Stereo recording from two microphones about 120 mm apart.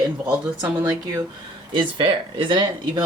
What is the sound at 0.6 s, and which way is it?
Speech, 30° right (ahead or behind).